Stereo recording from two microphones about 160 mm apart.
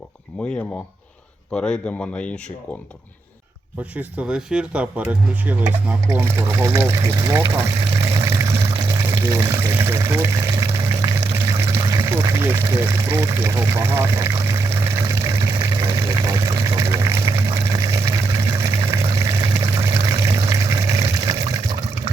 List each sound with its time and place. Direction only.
1.5 s speech: 5° left (ahead or behind)
3.9 s speech: 5° right (ahead or behind)
6.1 s pour: 15° right (ahead or behind)
19.1 s water: 20° right (ahead or behind)